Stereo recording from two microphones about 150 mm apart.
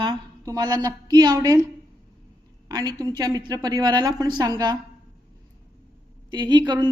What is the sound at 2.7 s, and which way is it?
A woman's voice, 25° right (ahead or behind).